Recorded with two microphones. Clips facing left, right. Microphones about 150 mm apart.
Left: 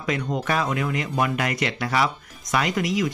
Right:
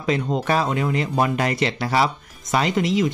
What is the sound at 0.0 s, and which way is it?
Speech, 30° right (ahead or behind).